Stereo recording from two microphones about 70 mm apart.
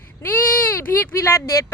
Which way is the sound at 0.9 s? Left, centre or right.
Left.